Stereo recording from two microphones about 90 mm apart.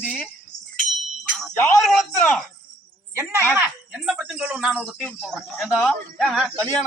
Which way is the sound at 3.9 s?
5° right (ahead or behind).